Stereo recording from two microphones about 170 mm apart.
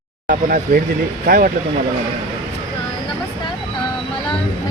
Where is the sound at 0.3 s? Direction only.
55° right (ahead or behind).